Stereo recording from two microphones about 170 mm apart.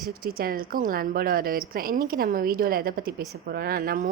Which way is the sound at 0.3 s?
60° right (ahead or behind).